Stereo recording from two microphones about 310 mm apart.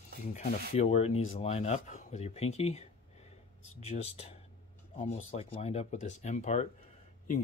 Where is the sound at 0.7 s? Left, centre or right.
Centre.